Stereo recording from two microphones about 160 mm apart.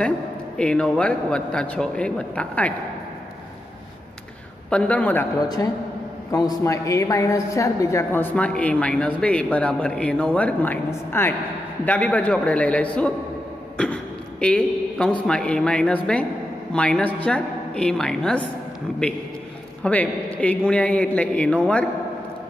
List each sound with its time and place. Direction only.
0.6 s a woman's voice: 5° left (ahead or behind)
4.6 s a woman's voice: 5° left (ahead or behind)
5.4 s a man's voice: 25° left (ahead or behind); by 18.4 s 5° left (ahead or behind)
19.8 s a man's voice: 10° left (ahead or behind)